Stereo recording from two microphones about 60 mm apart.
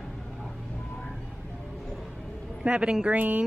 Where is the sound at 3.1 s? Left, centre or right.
Right.